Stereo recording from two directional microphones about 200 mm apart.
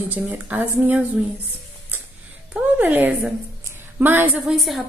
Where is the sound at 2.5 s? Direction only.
10° right (ahead or behind).